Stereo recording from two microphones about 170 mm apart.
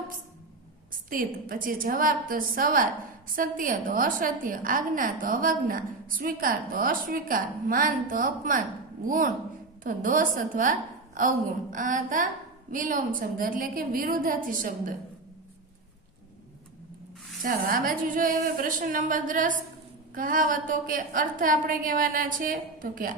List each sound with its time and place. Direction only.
1.1 s a woman's voice: 55° right (ahead or behind)
17.4 s a woman's voice: 55° right (ahead or behind)